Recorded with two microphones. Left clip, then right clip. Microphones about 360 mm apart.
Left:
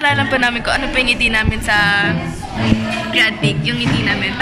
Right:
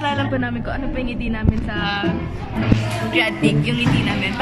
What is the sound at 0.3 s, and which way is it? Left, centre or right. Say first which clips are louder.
A woman's voice: left 9 dB; left.